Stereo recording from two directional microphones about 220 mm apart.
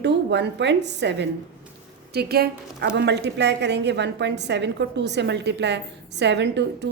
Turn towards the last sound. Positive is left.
turn(degrees=-50)  # may be behind; listen again after turning